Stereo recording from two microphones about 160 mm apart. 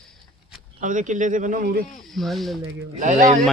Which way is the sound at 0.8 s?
50° right (ahead or behind).